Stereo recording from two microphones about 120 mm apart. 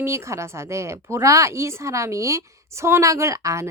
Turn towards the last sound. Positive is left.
turn(degrees=-25)  # may be behind; listen again after turning